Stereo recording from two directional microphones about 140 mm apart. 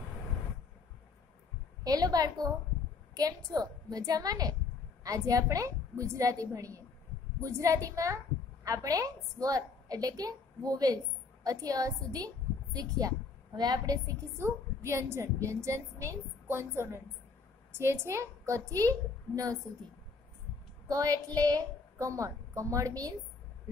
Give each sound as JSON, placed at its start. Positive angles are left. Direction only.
{"t": 1.9, "sound": "a woman's voice", "side_deg": -25}
{"t": 20.9, "sound": "a woman's voice", "side_deg": -25}